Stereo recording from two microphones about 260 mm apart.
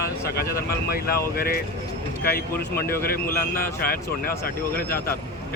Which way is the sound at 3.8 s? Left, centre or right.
Left.